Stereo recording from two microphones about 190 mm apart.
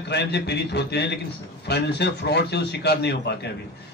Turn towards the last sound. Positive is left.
turn(degrees=60)  # may be behind; listen again after turning